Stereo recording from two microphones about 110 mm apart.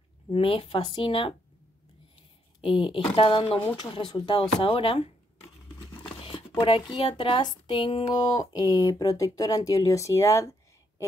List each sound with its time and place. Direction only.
0.3 s a woman's voice: 55° left (ahead or behind)
2.6 s a woman's voice: 50° left (ahead or behind); by 10.5 s 30° left (ahead or behind)